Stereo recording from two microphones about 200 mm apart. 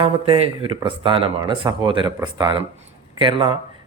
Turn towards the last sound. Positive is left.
turn(degrees=-25)  # may be behind; listen again after turning